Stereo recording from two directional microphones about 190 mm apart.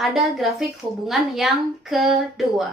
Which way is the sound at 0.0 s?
Centre (ahead or behind).